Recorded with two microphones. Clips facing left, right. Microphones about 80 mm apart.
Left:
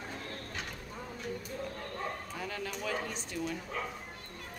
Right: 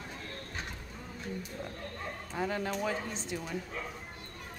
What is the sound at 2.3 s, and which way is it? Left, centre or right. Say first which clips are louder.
Speech: right 5 dB; right.